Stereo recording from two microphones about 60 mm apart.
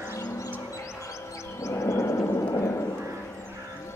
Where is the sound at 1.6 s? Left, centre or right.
Left.